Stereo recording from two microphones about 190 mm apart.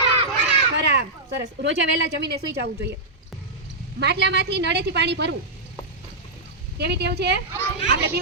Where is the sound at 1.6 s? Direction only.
70° right (ahead or behind).